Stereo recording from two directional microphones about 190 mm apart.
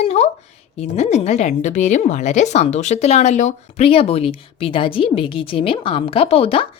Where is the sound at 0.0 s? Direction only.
35° left (ahead or behind).